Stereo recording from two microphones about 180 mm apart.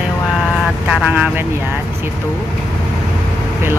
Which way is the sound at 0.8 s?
5° right (ahead or behind).